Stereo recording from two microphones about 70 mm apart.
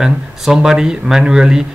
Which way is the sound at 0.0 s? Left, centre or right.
Centre.